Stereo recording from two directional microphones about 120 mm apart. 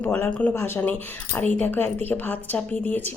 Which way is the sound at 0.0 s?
15° left (ahead or behind).